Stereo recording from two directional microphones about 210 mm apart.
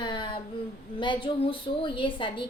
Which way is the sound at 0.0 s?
20° left (ahead or behind).